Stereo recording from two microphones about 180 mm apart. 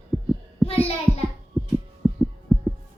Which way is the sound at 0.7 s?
35° left (ahead or behind).